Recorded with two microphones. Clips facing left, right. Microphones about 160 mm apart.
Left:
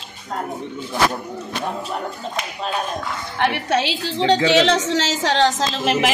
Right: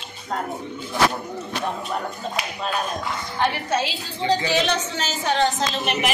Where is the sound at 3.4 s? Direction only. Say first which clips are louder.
Left 3 dB; 70° left (ahead or behind).